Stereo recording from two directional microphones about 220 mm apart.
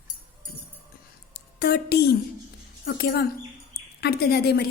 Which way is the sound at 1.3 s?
45° left (ahead or behind).